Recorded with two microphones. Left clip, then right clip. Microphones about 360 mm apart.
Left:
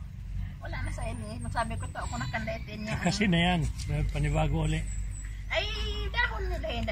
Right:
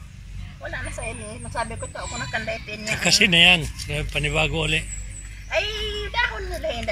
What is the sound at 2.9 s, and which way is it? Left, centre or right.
Speech, centre.